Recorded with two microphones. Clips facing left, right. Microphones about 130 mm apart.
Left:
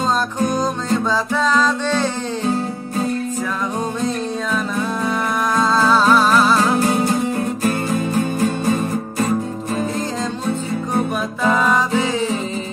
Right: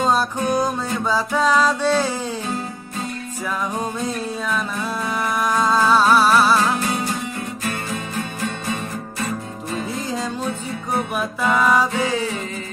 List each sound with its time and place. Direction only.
0.0 s music: 10° right (ahead or behind)
5.6 s music: 15° right (ahead or behind)
6.8 s music: 40° left (ahead or behind)